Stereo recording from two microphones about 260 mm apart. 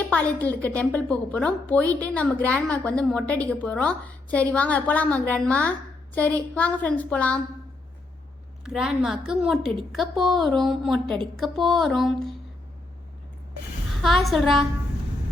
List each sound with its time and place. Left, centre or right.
0.1 s a woman's voice: centre
8.6 s a woman's voice: centre
14.0 s a woman's voice: centre